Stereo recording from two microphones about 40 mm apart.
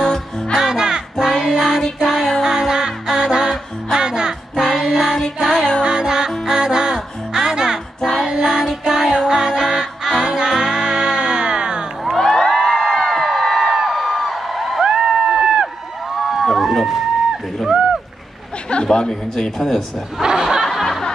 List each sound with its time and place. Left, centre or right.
0.0 s music: centre
0.6 s music: centre
1.2 s child singing: centre
2.0 s music: centre
2.4 s music: centre
8.2 s child singing: centre
8.8 s music: centre
12.2 s crowd: centre
13.7 s a sound: centre
14.8 s crowd: centre
16.4 s a sound: centre
18.9 s a man's voice: centre
20.2 s snicker: centre
20.8 s music: centre